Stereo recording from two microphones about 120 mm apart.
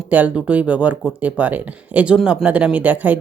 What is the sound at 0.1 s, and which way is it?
Speech, 10° right (ahead or behind).